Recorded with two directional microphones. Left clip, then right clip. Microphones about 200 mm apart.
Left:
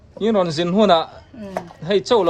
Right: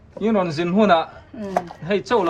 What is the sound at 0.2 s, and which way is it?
Speech, 5° left (ahead or behind).